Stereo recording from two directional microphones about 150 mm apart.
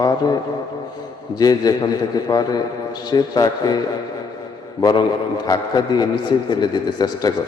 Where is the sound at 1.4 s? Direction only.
25° left (ahead or behind).